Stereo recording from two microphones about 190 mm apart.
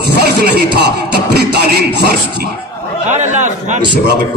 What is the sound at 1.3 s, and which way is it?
Speech, 55° right (ahead or behind).